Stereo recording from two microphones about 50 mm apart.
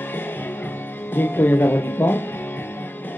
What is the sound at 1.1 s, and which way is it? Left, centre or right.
Music, left.